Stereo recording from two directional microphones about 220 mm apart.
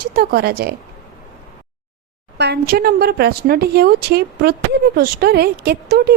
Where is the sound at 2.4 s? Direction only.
45° right (ahead or behind).